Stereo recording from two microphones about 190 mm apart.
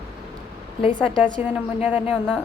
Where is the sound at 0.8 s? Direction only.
25° left (ahead or behind).